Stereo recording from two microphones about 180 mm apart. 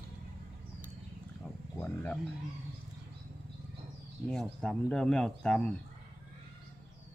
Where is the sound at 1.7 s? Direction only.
10° left (ahead or behind).